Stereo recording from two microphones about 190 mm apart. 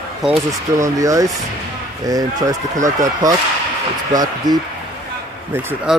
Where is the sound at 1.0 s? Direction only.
15° right (ahead or behind).